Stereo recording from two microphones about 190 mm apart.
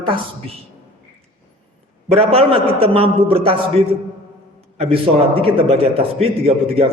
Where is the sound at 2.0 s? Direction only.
30° right (ahead or behind).